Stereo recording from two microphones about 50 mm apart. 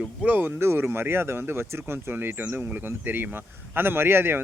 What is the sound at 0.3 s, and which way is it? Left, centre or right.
Speech, right.